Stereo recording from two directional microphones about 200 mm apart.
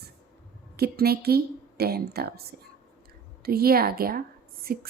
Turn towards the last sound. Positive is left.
turn(degrees=-50)  # may be behind; listen again after turning